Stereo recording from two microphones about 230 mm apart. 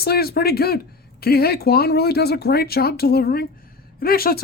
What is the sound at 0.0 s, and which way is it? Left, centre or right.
Speech, left.